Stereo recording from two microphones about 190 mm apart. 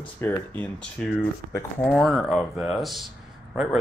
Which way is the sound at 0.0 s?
10° left (ahead or behind).